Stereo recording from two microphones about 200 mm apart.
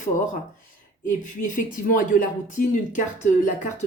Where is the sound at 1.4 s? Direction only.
40° left (ahead or behind).